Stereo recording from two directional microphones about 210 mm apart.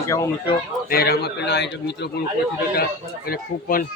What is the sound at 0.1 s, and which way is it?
Speech, 15° left (ahead or behind).